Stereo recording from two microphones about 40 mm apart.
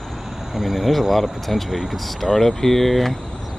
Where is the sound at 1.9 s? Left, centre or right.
Centre.